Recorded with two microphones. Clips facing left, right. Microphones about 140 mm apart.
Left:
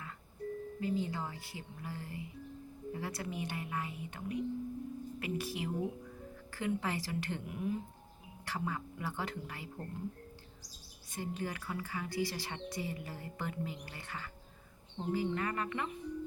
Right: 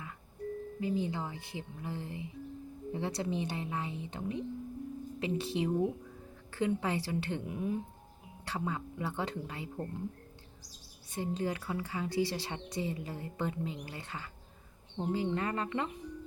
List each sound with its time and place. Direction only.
0.8 s a woman's voice: 20° right (ahead or behind)
11.1 s a woman's voice: 25° right (ahead or behind)